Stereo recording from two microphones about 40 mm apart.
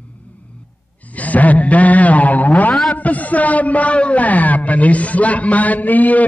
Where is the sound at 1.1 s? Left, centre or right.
Left.